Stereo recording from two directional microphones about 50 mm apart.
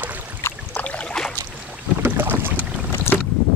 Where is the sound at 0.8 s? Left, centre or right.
Left.